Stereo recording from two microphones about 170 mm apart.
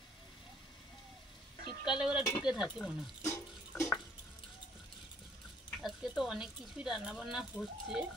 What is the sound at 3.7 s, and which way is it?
Water, 10° left (ahead or behind).